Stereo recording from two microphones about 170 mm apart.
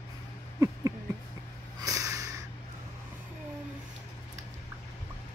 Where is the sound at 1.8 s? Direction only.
20° right (ahead or behind).